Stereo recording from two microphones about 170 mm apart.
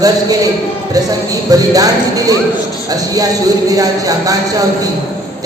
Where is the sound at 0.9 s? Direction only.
20° right (ahead or behind).